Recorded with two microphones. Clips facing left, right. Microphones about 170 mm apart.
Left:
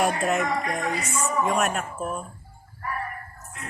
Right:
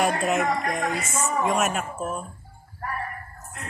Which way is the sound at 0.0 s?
Centre (ahead or behind).